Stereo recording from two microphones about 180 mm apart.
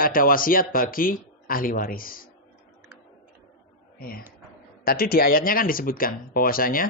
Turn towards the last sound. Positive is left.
turn(degrees=55)  # may be behind; listen again after turning